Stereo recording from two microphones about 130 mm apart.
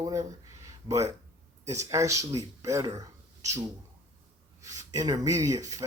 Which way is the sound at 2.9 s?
25° right (ahead or behind).